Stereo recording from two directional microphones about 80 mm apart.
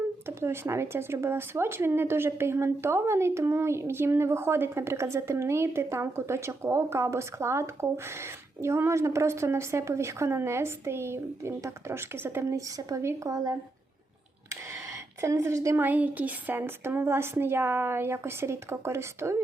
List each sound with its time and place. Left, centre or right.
0.3 s speech: right
15.2 s speech: right
15.8 s speech: right